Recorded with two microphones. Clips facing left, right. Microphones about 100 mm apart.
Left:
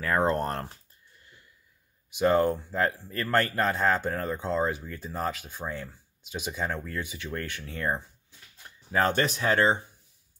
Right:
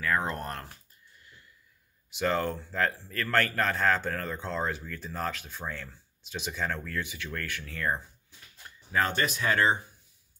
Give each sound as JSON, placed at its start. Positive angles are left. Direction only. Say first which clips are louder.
{"t": 0.0, "sound": "speech", "louder": "left 5 dB", "side_deg": 35}
{"t": 2.1, "sound": "a man's voice", "louder": "left 6 dB", "side_deg": 20}